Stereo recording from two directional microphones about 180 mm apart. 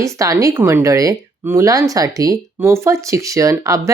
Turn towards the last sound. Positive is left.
turn(degrees=-15)  # may be behind; listen again after turning